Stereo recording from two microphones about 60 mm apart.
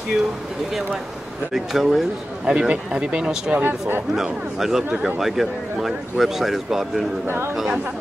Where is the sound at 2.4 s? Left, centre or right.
Centre.